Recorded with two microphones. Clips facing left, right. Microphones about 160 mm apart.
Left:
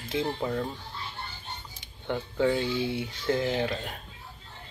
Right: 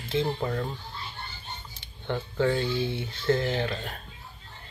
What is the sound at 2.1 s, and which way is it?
Speech, 10° left (ahead or behind).